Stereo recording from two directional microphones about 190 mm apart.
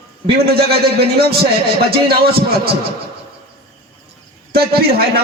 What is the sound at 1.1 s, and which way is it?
A man's voice, 55° right (ahead or behind).